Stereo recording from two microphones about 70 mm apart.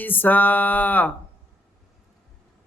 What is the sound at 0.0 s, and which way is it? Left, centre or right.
Music, left.